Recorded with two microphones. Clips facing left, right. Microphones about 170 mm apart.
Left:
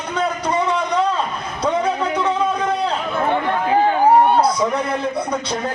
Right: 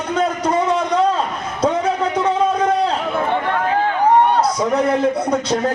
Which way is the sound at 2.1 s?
45° right (ahead or behind).